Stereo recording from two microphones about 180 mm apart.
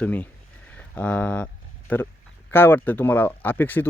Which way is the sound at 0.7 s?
10° left (ahead or behind).